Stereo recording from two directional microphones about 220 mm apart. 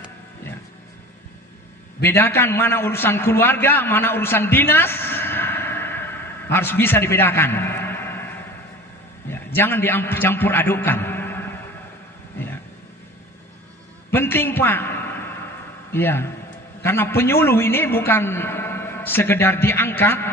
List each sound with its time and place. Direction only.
2.0 s a man's voice: 10° left (ahead or behind)
9.3 s a man's voice: 10° left (ahead or behind)
14.1 s a sound: 10° left (ahead or behind)
15.9 s a man's voice: 10° left (ahead or behind)